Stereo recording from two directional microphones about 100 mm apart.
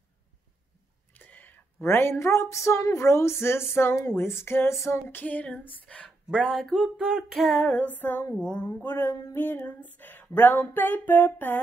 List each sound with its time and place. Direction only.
1.1 s speech: 20° left (ahead or behind)
6.6 s female singing: 5° right (ahead or behind)
7.7 s speech: 15° left (ahead or behind)